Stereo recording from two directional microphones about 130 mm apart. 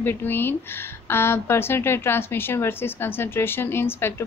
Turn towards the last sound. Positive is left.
turn(degrees=20)  # may be behind; listen again after turning